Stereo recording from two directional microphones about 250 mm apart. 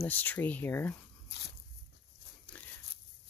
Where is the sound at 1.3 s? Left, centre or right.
Left.